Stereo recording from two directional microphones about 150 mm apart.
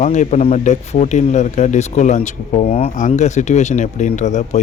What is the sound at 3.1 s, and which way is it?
Speech, 50° left (ahead or behind).